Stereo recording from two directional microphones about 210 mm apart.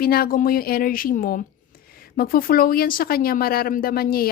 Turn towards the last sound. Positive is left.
turn(degrees=45)  # may be behind; listen again after turning